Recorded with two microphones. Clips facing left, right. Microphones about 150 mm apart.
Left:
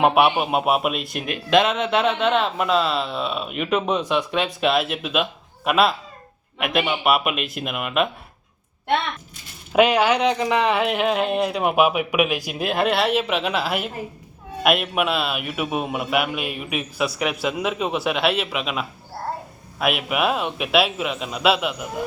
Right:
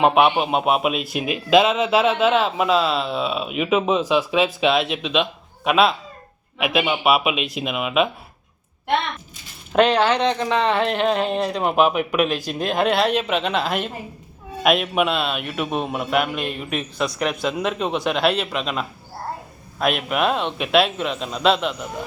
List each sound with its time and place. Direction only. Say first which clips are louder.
0.0 s a man's voice: right 1 dB; 5° left (ahead or behind)
9.7 s a man's voice: even; 10° left (ahead or behind)